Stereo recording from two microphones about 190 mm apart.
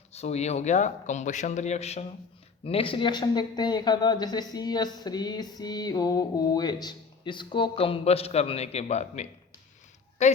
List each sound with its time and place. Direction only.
0.1 s a man's voice: 35° left (ahead or behind)